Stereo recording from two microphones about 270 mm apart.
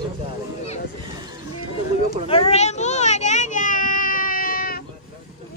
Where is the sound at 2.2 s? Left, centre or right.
Left.